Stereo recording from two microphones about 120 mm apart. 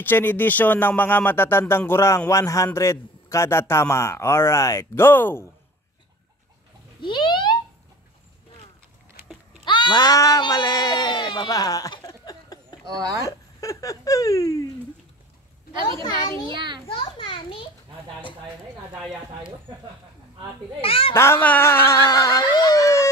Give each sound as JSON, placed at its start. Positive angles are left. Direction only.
{"t": 0.0, "sound": "speech", "side_deg": 15}
{"t": 7.0, "sound": "a sound", "side_deg": 40}
{"t": 9.7, "sound": "speech", "side_deg": 40}
{"t": 12.9, "sound": "speech", "side_deg": -30}
{"t": 13.2, "sound": "speech", "side_deg": 30}
{"t": 16.3, "sound": "a child's voice", "side_deg": 30}
{"t": 16.5, "sound": "speech", "side_deg": -40}
{"t": 16.8, "sound": "a child's voice", "side_deg": 45}
{"t": 20.8, "sound": "a child's voice", "side_deg": 50}
{"t": 21.1, "sound": "speech", "side_deg": 20}